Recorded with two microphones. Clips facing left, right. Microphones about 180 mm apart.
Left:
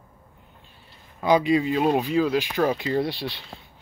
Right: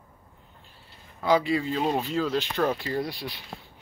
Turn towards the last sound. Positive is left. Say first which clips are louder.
# left 5 dB
turn(degrees=25)  # may be behind; listen again after turning